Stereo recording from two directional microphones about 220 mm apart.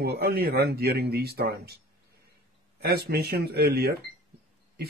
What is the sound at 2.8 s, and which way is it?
Speech, 45° right (ahead or behind).